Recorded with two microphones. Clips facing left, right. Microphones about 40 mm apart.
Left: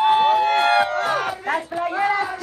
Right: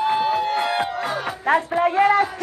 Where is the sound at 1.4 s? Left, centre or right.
Right.